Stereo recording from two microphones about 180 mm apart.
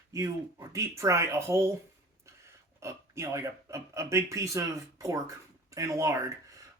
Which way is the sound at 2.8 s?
15° right (ahead or behind).